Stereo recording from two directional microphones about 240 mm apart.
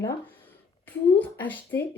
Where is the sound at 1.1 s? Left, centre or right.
Centre.